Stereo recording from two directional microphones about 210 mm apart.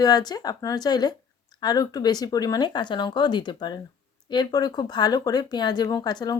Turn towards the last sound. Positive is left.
turn(degrees=20)  # may be behind; listen again after turning